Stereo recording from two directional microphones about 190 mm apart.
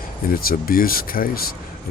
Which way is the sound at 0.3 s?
50° left (ahead or behind).